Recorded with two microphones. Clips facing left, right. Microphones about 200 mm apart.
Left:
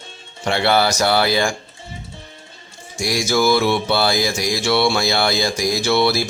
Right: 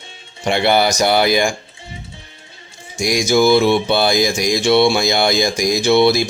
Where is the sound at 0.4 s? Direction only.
15° right (ahead or behind).